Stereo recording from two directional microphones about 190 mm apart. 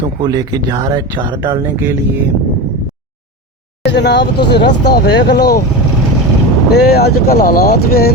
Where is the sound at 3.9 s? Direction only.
65° left (ahead or behind).